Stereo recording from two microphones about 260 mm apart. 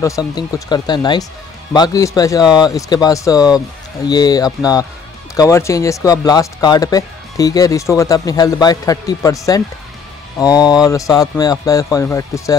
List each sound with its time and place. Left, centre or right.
0.0 s speech: centre